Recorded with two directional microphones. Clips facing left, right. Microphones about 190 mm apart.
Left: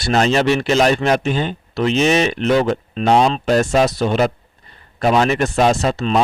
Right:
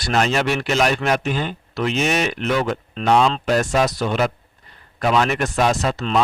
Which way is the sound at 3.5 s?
30° left (ahead or behind).